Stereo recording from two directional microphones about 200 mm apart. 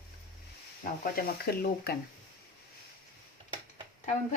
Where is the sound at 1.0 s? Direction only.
50° left (ahead or behind).